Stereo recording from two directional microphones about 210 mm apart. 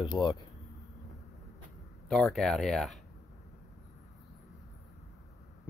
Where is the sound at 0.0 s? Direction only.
20° left (ahead or behind).